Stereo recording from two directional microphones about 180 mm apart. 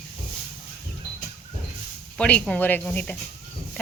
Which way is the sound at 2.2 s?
5° left (ahead or behind).